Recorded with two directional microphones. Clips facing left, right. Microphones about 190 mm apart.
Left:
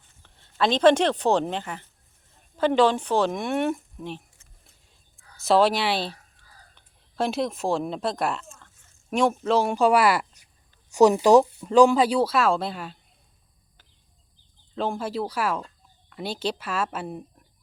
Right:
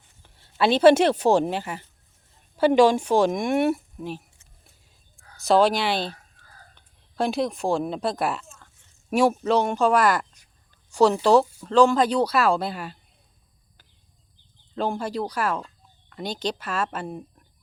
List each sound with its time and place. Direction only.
0.2 s a sound: 5° right (ahead or behind)
0.5 s speech: 10° right (ahead or behind)
5.4 s speech: centre (ahead or behind)
14.8 s speech: centre (ahead or behind)